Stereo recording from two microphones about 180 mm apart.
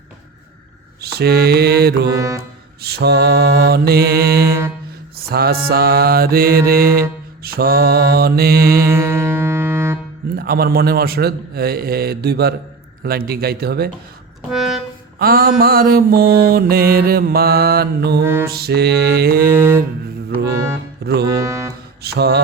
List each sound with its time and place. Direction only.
1.0 s mantra: 60° right (ahead or behind)
2.1 s mantra: 15° right (ahead or behind)
2.8 s mantra: 65° right (ahead or behind)
8.9 s music: 15° right (ahead or behind)
10.3 s mantra: 55° right (ahead or behind)
14.5 s music: centre (ahead or behind)
15.2 s mantra: 55° right (ahead or behind)
18.2 s mantra: 10° right (ahead or behind)
18.4 s mantra: 60° right (ahead or behind)
19.5 s mantra: 10° right (ahead or behind)
21.0 s music: 65° right (ahead or behind)
21.2 s speech: 15° right (ahead or behind)
22.0 s mantra: 65° right (ahead or behind)